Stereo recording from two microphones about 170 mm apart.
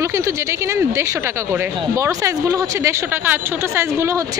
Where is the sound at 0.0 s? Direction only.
15° right (ahead or behind).